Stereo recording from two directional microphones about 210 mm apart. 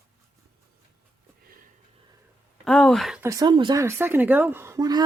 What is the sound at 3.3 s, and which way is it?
Speech, 20° right (ahead or behind).